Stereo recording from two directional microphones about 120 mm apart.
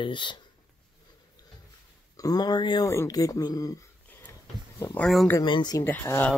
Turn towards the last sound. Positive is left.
turn(degrees=20)  # may be behind; listen again after turning